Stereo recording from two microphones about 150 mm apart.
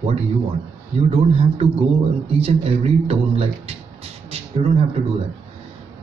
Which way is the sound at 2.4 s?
40° right (ahead or behind).